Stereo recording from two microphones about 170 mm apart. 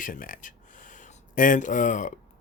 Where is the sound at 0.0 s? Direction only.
55° left (ahead or behind).